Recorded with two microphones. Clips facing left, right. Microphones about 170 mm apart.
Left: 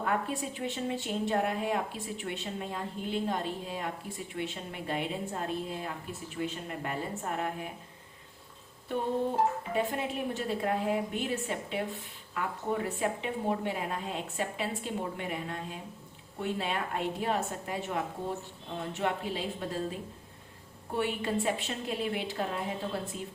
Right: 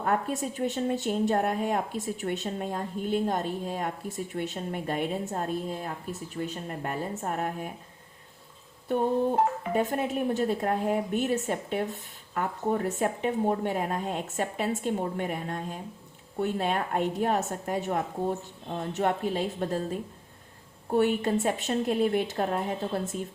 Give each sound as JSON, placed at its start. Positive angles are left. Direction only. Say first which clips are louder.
{"t": 0.0, "sound": "speech", "louder": "right 4 dB", "side_deg": -45}
{"t": 8.9, "sound": "speech", "louder": "right 5 dB", "side_deg": -50}